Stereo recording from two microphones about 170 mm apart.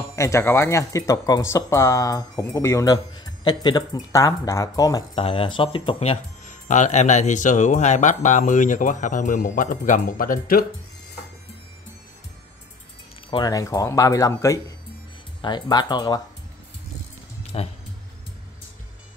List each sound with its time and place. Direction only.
0.1 s speech: 15° left (ahead or behind)
5.1 s speech: 35° left (ahead or behind); by 10.6 s 55° left (ahead or behind)
13.3 s speech: 20° left (ahead or behind)
17.4 s music: 35° left (ahead or behind)